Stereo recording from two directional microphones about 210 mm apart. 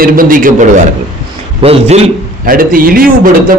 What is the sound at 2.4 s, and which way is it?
A man's voice, 40° right (ahead or behind).